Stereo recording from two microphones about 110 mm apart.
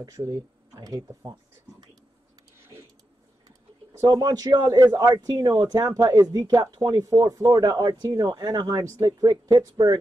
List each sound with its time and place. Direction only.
0.0 s speech: 30° right (ahead or behind)
2.5 s a sound: 25° right (ahead or behind)
4.0 s speech: 30° right (ahead or behind)